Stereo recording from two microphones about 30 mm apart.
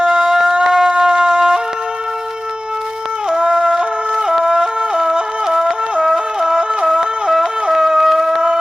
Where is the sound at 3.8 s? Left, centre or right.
Right.